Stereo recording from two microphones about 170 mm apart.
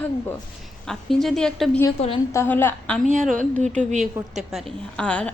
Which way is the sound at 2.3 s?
15° left (ahead or behind).